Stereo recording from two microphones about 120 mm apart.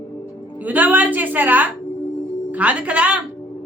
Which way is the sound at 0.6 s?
15° right (ahead or behind).